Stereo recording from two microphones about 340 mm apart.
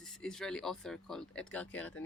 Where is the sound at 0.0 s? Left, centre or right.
Centre.